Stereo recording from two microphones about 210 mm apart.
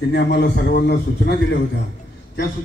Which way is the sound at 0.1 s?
55° left (ahead or behind).